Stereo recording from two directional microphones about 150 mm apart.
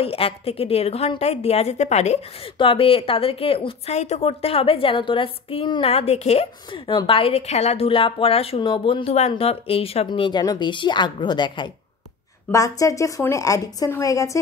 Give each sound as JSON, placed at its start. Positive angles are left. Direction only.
{"t": 0.0, "sound": "a woman's voice", "side_deg": 40}
{"t": 2.6, "sound": "a woman's voice", "side_deg": 40}